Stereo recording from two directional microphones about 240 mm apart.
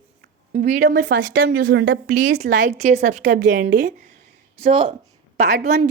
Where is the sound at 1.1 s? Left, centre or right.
Right.